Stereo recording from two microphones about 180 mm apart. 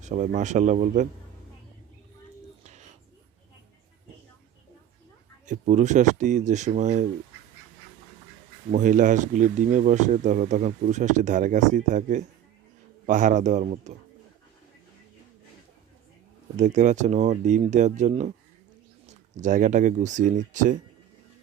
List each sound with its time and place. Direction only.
0.0 s speech: 40° right (ahead or behind)
2.6 s whispering: 40° right (ahead or behind)
5.5 s speech: 45° right (ahead or behind)
8.7 s speech: 45° right (ahead or behind)
16.6 s speech: 40° right (ahead or behind)